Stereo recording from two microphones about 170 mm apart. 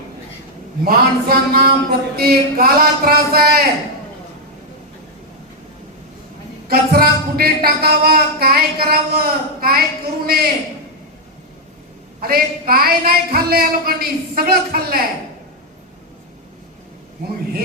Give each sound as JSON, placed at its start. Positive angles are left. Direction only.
{"t": 0.9, "sound": "speech", "side_deg": -65}
{"t": 6.7, "sound": "speech", "side_deg": -65}
{"t": 12.2, "sound": "speech", "side_deg": -60}